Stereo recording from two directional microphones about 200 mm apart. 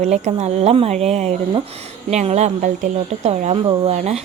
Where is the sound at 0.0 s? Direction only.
35° right (ahead or behind).